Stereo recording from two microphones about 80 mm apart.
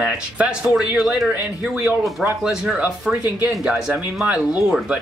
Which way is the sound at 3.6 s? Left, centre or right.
Centre.